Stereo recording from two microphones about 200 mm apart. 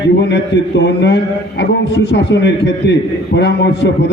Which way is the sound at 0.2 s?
60° left (ahead or behind).